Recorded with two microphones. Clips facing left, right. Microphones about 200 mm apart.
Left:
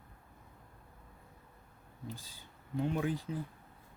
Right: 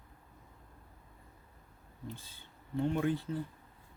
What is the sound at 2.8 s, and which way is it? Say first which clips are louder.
Speech: right 2 dB; 5° left (ahead or behind).